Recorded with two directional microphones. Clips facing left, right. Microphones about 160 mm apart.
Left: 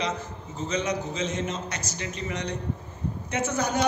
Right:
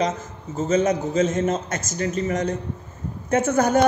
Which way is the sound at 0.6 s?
45° right (ahead or behind).